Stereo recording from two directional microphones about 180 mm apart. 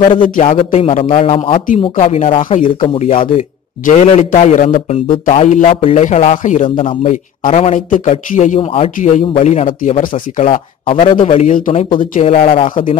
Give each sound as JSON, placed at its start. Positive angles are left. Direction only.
{"t": 0.1, "sound": "a man's voice", "side_deg": 30}
{"t": 5.3, "sound": "a man's voice", "side_deg": 35}
{"t": 6.6, "sound": "a man's voice", "side_deg": 35}
{"t": 8.5, "sound": "a man's voice", "side_deg": 30}
{"t": 11.9, "sound": "speech", "side_deg": 30}